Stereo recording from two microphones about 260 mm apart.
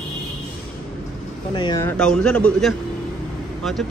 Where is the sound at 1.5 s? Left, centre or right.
Centre.